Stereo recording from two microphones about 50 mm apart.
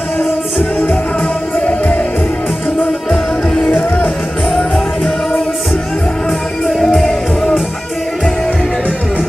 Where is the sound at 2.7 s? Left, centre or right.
Centre.